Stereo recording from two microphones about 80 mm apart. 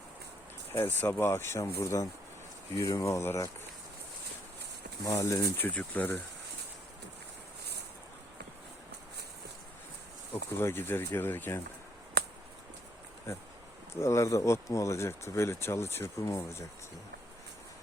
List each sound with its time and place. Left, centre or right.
0.7 s speech: left
5.0 s speech: left
5.7 s speech: centre
10.3 s speech: left
13.3 s speech: left